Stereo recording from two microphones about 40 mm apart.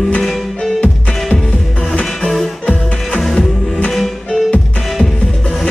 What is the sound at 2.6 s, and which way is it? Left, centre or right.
Music, left.